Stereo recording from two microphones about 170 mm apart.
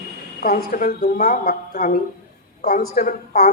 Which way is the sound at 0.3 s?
60° left (ahead or behind).